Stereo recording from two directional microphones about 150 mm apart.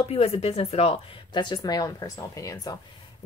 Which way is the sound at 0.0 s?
40° left (ahead or behind).